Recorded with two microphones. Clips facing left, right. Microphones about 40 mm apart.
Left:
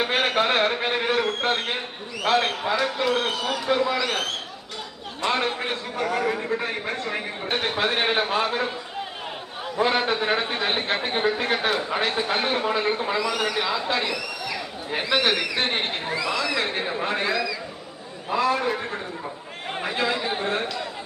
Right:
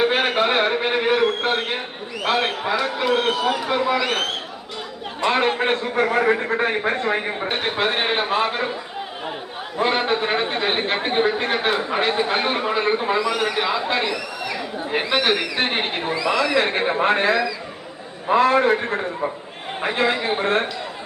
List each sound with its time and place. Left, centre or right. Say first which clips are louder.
0.0 s a man's voice: right 3 dB; centre
5.2 s a man's voice: right 5 dB; right
7.4 s a man's voice: left 1 dB; centre
9.7 s a man's voice: right 2 dB; centre
16.6 s a man's voice: right 6 dB; right